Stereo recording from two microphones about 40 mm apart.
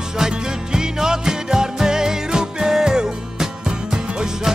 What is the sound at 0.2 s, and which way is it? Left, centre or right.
Music, centre.